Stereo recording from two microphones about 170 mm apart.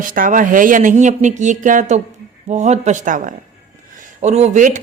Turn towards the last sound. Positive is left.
turn(degrees=-50)  # may be behind; listen again after turning